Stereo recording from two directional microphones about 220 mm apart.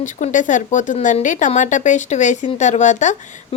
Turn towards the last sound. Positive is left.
turn(degrees=35)  # may be behind; listen again after turning